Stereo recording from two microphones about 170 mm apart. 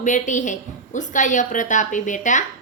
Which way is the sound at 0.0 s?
45° left (ahead or behind).